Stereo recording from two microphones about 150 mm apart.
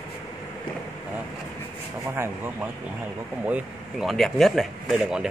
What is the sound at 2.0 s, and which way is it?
Speech, 15° right (ahead or behind).